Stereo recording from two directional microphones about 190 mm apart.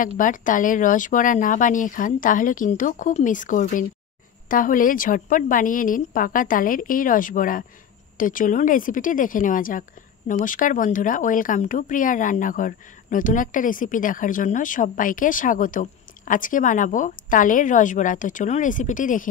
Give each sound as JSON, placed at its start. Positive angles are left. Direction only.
{"t": 0.0, "sound": "a woman's voice", "side_deg": 45}